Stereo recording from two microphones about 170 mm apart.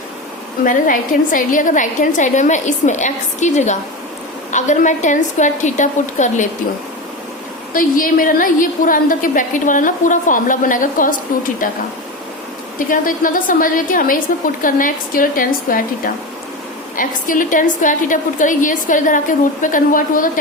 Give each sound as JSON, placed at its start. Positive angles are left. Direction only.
{"t": 0.6, "sound": "a woman's voice", "side_deg": 50}
{"t": 7.7, "sound": "a woman's voice", "side_deg": 55}
{"t": 12.9, "sound": "a woman's voice", "side_deg": 55}